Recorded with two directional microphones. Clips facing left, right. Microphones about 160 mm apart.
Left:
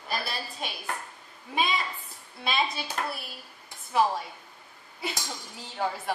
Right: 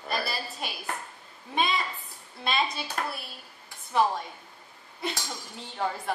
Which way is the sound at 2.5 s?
Centre (ahead or behind).